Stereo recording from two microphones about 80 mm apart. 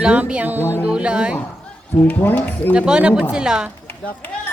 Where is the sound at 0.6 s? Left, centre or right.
Left.